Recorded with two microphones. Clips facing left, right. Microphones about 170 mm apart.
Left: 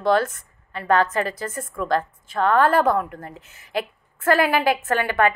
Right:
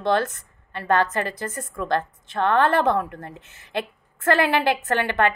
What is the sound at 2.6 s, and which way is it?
Speech, 25° right (ahead or behind).